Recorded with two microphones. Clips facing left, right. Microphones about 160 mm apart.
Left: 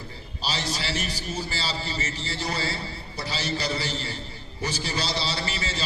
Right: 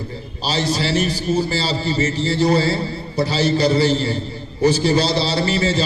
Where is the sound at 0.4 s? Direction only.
30° right (ahead or behind).